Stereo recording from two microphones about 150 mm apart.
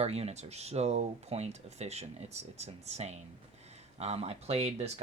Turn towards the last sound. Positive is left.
turn(degrees=-45)  # may be behind; listen again after turning